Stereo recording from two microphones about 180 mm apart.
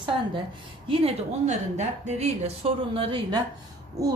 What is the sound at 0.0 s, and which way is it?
A woman's voice, 25° right (ahead or behind).